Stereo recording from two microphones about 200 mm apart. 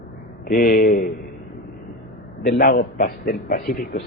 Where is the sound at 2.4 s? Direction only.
45° left (ahead or behind).